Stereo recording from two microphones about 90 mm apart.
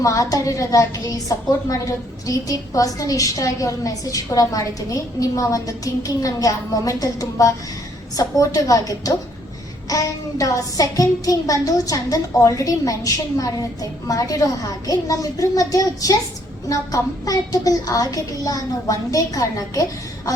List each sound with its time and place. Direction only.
0.0 s a woman's voice: 40° left (ahead or behind)